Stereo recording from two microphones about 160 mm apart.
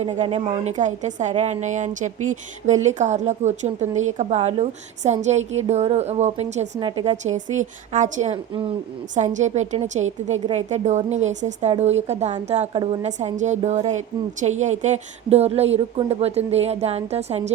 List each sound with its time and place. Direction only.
0.0 s a woman's voice: 40° right (ahead or behind)